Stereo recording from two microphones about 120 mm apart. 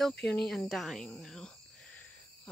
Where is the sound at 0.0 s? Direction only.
5° left (ahead or behind).